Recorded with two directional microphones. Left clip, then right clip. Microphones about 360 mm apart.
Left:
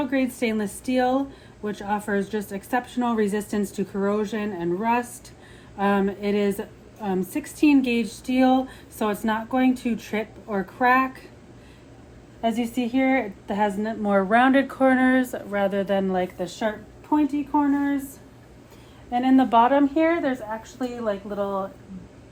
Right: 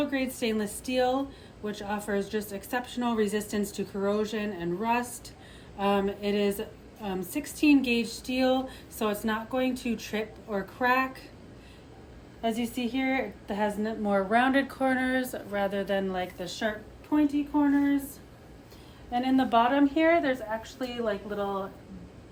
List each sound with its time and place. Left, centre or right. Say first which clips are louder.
0.0 s a woman's voice: left 5 dB; centre
12.4 s a woman's voice: left 5 dB; centre
19.1 s a woman's voice: left 6 dB; centre